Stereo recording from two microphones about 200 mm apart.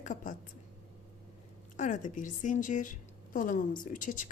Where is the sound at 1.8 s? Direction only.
40° left (ahead or behind).